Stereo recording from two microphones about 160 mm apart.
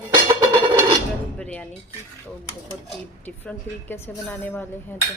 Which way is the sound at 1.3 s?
10° left (ahead or behind).